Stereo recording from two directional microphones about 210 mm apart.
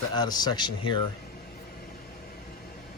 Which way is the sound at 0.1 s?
20° left (ahead or behind).